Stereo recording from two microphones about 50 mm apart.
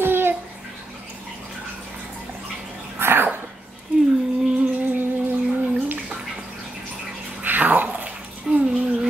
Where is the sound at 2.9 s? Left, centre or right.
Right.